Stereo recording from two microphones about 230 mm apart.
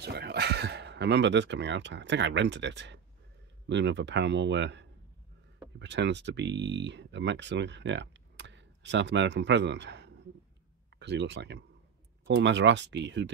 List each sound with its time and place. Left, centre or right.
0.0 s speech: right